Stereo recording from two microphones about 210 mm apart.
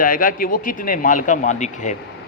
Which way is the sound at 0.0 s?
40° left (ahead or behind).